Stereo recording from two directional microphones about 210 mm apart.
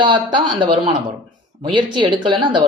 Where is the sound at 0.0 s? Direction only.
20° right (ahead or behind).